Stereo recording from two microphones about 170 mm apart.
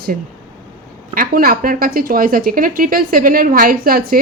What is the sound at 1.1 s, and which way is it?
A woman's voice, 60° right (ahead or behind).